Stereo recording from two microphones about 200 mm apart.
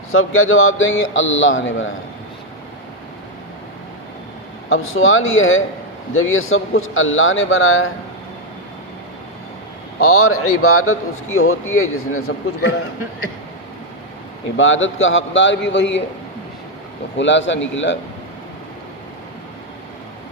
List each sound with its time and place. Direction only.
0.1 s speech: 90° left; by 1.9 s 70° left (ahead or behind)
4.7 s speech: 80° left
10.0 s a man's voice: 90° left
14.5 s speech: 70° left (ahead or behind)
17.2 s speech: 65° left (ahead or behind)